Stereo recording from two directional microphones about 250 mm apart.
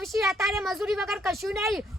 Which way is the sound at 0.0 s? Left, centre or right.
Centre.